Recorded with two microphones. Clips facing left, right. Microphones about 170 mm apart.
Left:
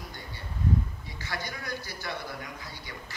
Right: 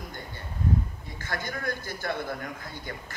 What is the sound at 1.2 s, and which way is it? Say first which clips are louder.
A man's voice: right 3 dB; 50° right (ahead or behind).